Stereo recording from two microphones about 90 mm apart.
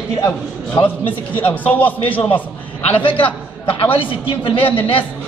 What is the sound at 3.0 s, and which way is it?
A man's voice, 70° left (ahead or behind).